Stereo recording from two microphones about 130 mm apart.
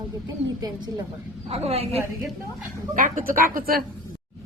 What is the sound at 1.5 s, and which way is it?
Speech, 50° right (ahead or behind).